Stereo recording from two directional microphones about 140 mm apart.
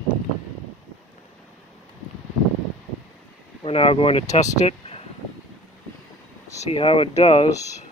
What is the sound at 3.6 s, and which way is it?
Speech, 45° left (ahead or behind).